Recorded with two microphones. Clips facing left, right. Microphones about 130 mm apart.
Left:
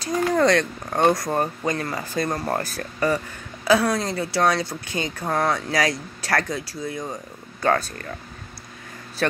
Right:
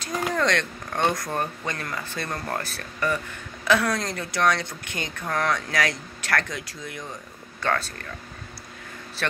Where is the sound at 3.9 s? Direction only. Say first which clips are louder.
Left 4 dB; 10° left (ahead or behind).